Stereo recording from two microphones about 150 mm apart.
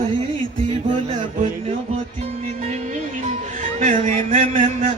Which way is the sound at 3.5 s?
55° right (ahead or behind).